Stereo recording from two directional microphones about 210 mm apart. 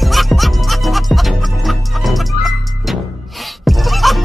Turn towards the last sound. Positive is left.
turn(degrees=0)  # may be behind; listen again after turning